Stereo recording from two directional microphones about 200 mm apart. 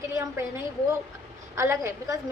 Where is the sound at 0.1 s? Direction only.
15° right (ahead or behind).